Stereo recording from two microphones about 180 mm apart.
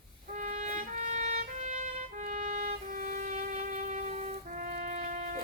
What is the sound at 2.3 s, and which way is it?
Music, 45° right (ahead or behind).